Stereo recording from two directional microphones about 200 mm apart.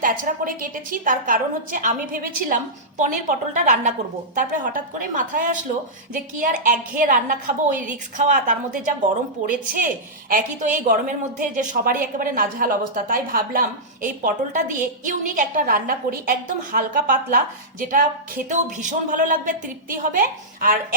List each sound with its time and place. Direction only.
0.0 s a woman's voice: 45° right (ahead or behind)